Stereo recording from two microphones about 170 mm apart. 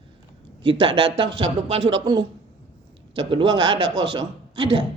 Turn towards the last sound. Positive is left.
turn(degrees=-30)  # may be behind; listen again after turning